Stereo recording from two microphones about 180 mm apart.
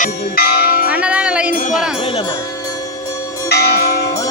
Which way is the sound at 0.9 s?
5° right (ahead or behind).